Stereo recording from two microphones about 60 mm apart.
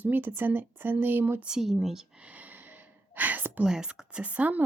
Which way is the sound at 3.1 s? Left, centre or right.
Right.